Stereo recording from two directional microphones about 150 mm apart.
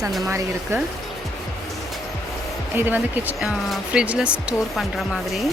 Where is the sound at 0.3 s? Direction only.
20° right (ahead or behind).